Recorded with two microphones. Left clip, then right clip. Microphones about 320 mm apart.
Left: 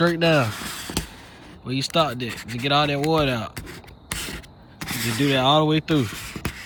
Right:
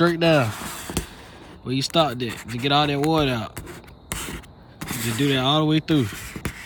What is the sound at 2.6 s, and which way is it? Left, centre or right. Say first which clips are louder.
Speech: even; centre.